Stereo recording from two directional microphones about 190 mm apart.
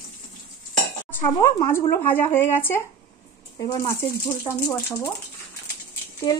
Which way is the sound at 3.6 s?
25° left (ahead or behind).